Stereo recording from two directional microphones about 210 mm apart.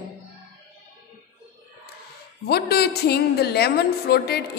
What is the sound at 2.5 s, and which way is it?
A woman's voice, 50° left (ahead or behind).